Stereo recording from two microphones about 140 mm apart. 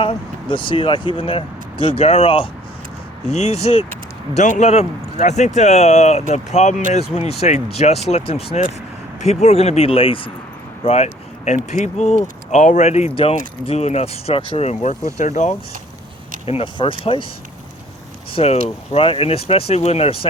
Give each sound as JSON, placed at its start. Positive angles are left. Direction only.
{"t": 0.0, "sound": "speech", "side_deg": 40}
{"t": 4.4, "sound": "speech", "side_deg": 55}
{"t": 16.5, "sound": "speech", "side_deg": 40}
{"t": 18.3, "sound": "speech", "side_deg": 45}